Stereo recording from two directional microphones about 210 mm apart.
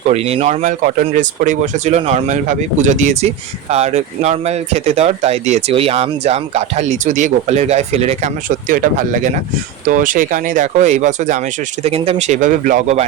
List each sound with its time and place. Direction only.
0.1 s speech: 30° right (ahead or behind)